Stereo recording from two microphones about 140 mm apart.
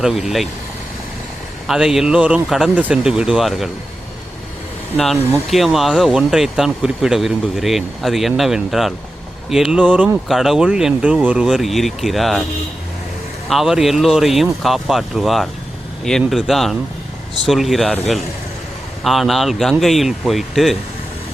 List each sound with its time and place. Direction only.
0.0 s speech: centre (ahead or behind)
1.6 s speech: 5° right (ahead or behind)
5.5 s speech: centre (ahead or behind)
13.5 s speech: centre (ahead or behind)